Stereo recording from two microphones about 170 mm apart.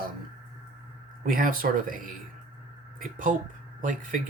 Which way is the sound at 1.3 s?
55° right (ahead or behind).